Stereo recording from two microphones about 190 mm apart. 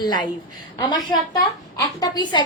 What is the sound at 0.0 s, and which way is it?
A woman's voice, 20° left (ahead or behind).